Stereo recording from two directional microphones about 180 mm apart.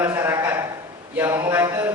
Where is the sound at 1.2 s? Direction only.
10° right (ahead or behind).